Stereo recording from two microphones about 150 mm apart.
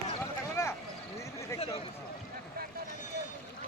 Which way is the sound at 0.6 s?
20° left (ahead or behind).